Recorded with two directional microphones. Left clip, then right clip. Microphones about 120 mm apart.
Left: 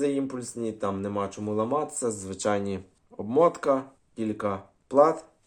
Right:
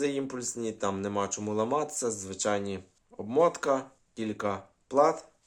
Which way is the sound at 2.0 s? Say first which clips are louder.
Left 3 dB; centre (ahead or behind).